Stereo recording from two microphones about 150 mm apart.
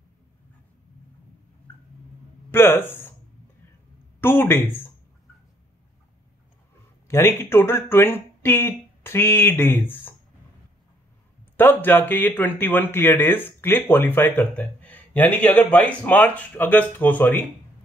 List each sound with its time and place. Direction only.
2.5 s speech: 15° left (ahead or behind)
4.2 s a sound: 15° left (ahead or behind)
7.1 s speech: 15° left (ahead or behind)
11.5 s speech: 15° left (ahead or behind)